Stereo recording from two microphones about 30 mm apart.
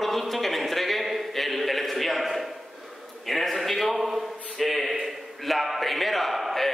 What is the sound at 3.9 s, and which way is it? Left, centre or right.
Speech, centre.